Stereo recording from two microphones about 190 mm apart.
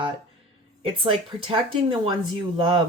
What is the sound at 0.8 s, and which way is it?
Speech, 30° right (ahead or behind).